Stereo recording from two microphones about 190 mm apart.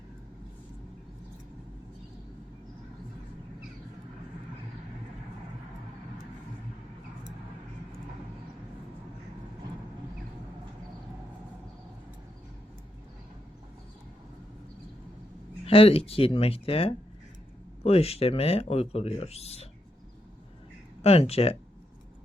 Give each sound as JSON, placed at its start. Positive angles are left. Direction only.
{"t": 15.6, "sound": "speech", "side_deg": 30}
{"t": 21.0, "sound": "speech", "side_deg": 30}